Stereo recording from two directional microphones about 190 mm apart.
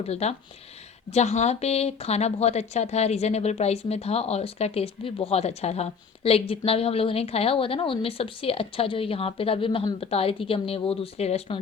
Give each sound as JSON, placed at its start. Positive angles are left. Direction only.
{"t": 0.0, "sound": "speech", "side_deg": 35}